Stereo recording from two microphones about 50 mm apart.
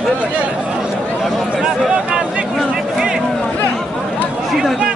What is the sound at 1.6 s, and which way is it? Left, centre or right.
Speech, centre.